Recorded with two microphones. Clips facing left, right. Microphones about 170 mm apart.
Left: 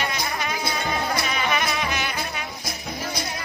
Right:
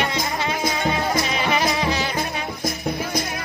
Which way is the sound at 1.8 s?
30° right (ahead or behind).